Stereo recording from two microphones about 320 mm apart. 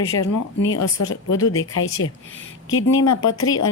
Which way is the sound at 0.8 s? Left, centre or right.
Left.